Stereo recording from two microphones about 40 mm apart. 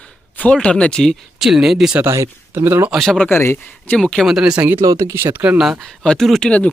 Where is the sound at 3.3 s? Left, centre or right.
Left.